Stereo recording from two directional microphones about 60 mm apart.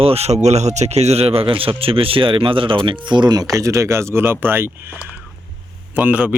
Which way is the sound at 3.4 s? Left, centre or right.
Right.